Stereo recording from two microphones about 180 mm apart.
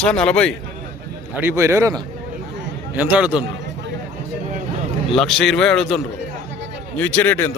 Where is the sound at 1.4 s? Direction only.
15° right (ahead or behind).